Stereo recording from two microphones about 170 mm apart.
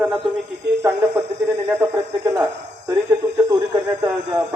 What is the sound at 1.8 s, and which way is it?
Speech, 15° right (ahead or behind).